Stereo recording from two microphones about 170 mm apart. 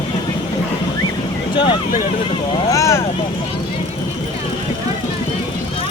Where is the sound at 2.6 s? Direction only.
20° left (ahead or behind).